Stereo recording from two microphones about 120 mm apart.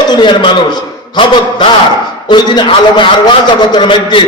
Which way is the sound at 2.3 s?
40° left (ahead or behind).